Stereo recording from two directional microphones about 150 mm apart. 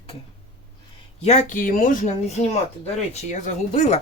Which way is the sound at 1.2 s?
55° left (ahead or behind).